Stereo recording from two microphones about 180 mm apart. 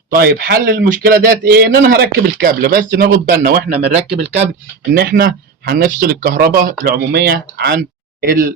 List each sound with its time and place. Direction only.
0.1 s a man's voice: 60° right (ahead or behind)
4.9 s a man's voice: 60° right (ahead or behind)